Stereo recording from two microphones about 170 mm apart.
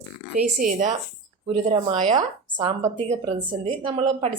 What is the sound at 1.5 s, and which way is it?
Speech, 35° right (ahead or behind).